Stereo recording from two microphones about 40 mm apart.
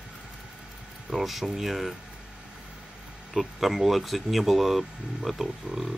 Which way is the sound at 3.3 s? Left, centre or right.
Centre.